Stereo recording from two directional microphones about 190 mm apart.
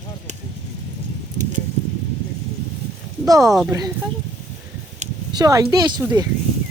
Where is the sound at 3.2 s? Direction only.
20° right (ahead or behind).